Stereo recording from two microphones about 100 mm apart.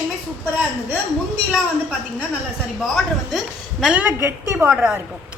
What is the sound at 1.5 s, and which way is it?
A woman's voice, 10° right (ahead or behind).